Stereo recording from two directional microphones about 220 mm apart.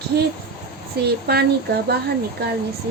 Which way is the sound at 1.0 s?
45° right (ahead or behind).